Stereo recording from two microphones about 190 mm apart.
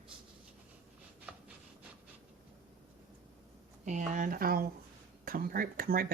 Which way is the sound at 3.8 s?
40° right (ahead or behind).